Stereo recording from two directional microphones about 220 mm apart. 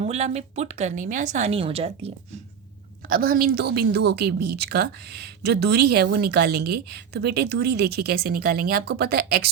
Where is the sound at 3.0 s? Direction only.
40° right (ahead or behind).